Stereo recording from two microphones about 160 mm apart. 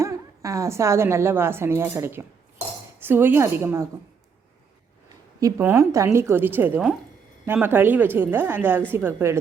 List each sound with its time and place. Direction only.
0.0 s a woman's voice: 20° right (ahead or behind)
5.4 s a woman's voice: 20° right (ahead or behind)